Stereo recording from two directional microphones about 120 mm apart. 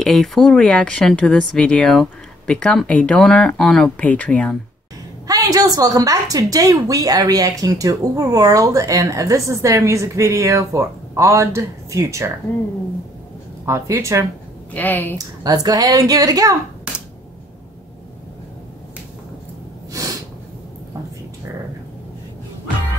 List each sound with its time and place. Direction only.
0.0 s speech: centre (ahead or behind)
5.2 s a woman's voice: 30° right (ahead or behind)
13.7 s a woman's voice: 25° right (ahead or behind)
14.7 s speech: 15° left (ahead or behind)
15.1 s speech: 30° right (ahead or behind)
19.9 s snort: 25° right (ahead or behind)